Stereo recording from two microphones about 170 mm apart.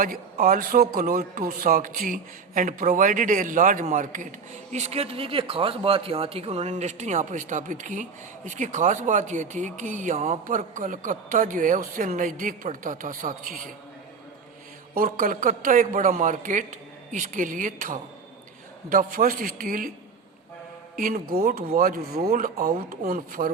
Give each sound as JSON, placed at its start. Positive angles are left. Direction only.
{"t": 0.0, "sound": "speech", "side_deg": -55}
{"t": 14.9, "sound": "a man's voice", "side_deg": -60}
{"t": 20.9, "sound": "a man's voice", "side_deg": -55}